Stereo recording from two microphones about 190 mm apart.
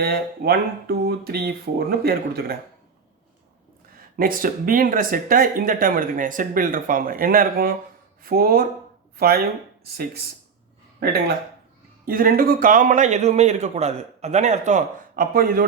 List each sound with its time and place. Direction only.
0.0 s speech: 55° right (ahead or behind)
3.9 s speech: 50° right (ahead or behind)
11.0 s a man's voice: 55° right (ahead or behind)